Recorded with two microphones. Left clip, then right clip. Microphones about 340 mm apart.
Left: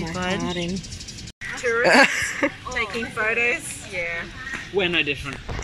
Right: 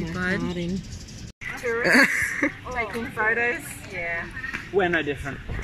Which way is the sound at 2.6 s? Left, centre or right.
Centre.